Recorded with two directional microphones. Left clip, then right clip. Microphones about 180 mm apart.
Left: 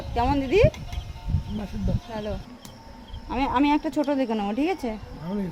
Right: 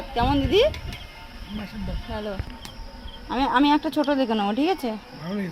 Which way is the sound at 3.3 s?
10° right (ahead or behind).